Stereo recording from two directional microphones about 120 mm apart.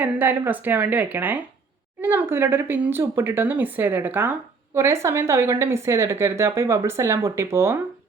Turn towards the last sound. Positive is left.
turn(degrees=-25)  # may be behind; listen again after turning